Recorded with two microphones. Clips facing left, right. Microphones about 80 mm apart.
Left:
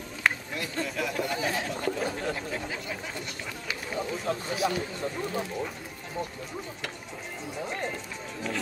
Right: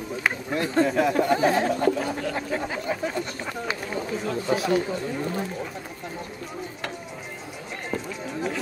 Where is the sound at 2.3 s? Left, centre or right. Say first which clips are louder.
Right 6 dB; right.